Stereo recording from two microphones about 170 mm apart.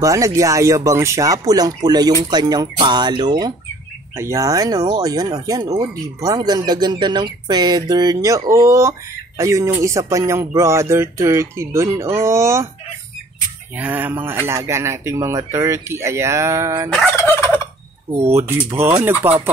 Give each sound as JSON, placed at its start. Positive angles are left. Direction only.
{"t": 0.0, "sound": "speech", "side_deg": -20}
{"t": 13.7, "sound": "speech", "side_deg": -10}
{"t": 16.9, "sound": "fowl", "side_deg": 10}
{"t": 18.3, "sound": "speech", "side_deg": -15}